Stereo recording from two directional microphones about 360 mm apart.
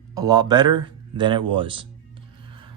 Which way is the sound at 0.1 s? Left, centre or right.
Centre.